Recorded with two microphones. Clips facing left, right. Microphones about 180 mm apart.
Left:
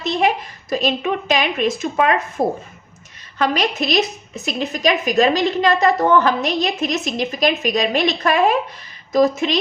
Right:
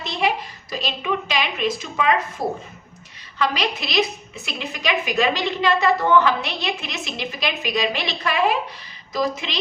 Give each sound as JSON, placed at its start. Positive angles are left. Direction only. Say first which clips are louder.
{"t": 0.0, "sound": "a woman's voice", "louder": "left 5 dB", "side_deg": 45}